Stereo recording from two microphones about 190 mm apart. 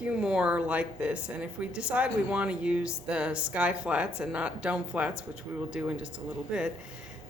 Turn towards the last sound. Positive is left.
turn(degrees=-5)  # may be behind; listen again after turning